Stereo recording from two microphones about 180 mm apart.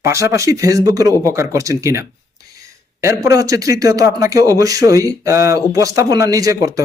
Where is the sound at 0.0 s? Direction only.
15° right (ahead or behind).